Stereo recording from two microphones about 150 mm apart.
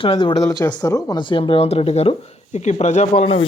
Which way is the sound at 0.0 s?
35° left (ahead or behind).